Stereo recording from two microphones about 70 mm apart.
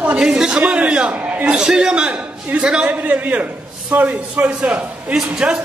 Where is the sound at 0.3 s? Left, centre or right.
Centre.